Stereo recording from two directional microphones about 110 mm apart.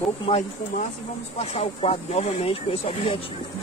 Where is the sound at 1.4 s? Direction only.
75° left (ahead or behind).